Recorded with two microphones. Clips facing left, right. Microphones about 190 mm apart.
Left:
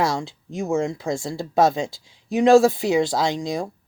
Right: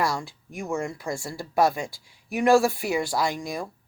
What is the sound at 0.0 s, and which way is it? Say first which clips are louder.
Speech: left 4 dB; 20° left (ahead or behind).